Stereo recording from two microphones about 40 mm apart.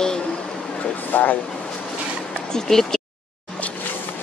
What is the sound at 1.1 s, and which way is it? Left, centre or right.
Speech, left.